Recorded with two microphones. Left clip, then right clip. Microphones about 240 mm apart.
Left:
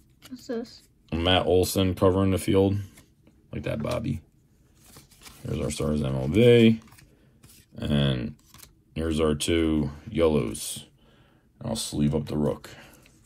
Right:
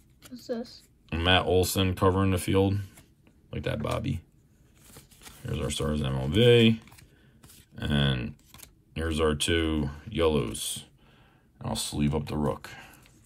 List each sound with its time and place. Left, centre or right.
0.3 s a woman's voice: left
1.0 s speech: centre
4.9 s pig: centre
5.4 s speech: centre
12.1 s speech: right